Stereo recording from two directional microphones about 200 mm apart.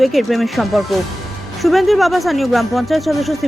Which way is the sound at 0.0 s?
Centre (ahead or behind).